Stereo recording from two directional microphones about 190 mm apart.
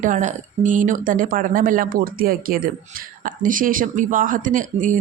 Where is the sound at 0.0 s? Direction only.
40° right (ahead or behind).